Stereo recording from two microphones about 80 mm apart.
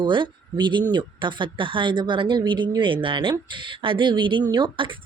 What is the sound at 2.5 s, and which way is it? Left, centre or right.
Speech, right.